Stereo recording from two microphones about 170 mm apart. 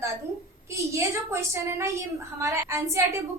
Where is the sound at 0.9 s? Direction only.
15° right (ahead or behind).